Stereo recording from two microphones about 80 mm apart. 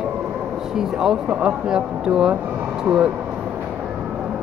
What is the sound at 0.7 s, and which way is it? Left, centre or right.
Speech, centre.